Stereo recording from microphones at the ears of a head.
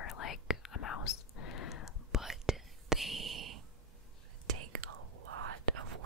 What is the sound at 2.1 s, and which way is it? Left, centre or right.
Whispering, centre.